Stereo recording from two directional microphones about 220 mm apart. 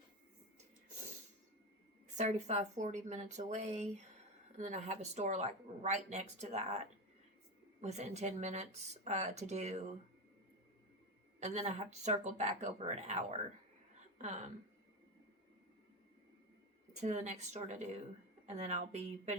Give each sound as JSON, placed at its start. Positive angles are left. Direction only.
{"t": 2.1, "sound": "a woman's voice", "side_deg": -30}
{"t": 11.3, "sound": "a woman's voice", "side_deg": -30}
{"t": 17.0, "sound": "a woman's voice", "side_deg": -35}